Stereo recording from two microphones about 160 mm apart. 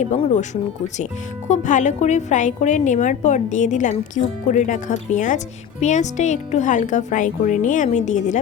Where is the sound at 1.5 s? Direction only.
50° left (ahead or behind).